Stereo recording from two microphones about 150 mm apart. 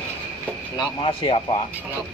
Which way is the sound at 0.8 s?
35° left (ahead or behind).